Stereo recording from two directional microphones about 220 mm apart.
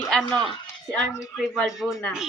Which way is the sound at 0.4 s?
25° left (ahead or behind).